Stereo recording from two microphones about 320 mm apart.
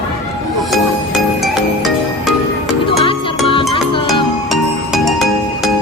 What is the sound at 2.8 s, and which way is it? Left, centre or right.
Music, centre.